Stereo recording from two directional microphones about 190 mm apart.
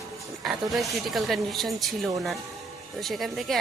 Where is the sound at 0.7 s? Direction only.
Centre (ahead or behind).